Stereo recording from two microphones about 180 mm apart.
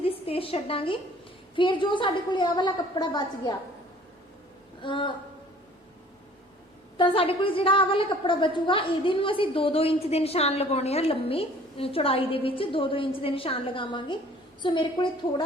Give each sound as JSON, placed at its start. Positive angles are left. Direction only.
{"t": 0.0, "sound": "a woman's voice", "side_deg": 30}
{"t": 4.8, "sound": "a woman's voice", "side_deg": 25}
{"t": 6.9, "sound": "a woman's voice", "side_deg": 30}